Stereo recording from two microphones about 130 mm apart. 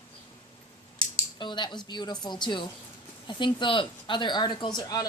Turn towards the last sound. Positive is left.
turn(degrees=30)  # may be behind; listen again after turning